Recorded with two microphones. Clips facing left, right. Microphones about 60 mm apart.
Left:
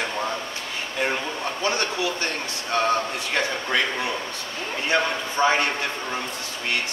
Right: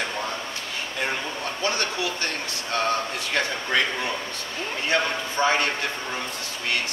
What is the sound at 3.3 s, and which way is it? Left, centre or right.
A man's voice, centre.